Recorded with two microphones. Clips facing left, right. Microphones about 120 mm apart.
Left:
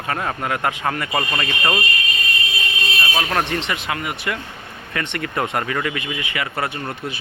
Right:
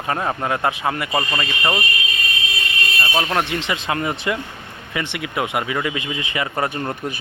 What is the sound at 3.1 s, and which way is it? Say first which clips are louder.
Speech: right 1 dB; 15° right (ahead or behind).